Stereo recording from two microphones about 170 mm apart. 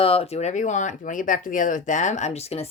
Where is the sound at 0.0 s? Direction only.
35° left (ahead or behind).